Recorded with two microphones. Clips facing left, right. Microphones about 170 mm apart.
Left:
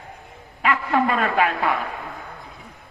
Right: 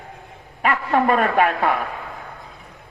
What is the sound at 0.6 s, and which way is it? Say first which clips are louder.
A woman's voice: right 2 dB; 45° right (ahead or behind).